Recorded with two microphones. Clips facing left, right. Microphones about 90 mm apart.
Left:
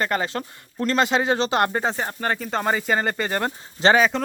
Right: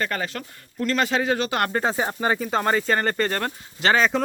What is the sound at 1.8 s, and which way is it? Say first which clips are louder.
Speech: right 2 dB; 10° right (ahead or behind).